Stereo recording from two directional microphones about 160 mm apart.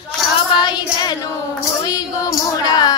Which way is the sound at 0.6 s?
30° left (ahead or behind).